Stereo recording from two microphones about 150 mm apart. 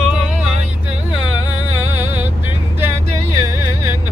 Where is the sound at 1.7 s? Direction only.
15° right (ahead or behind).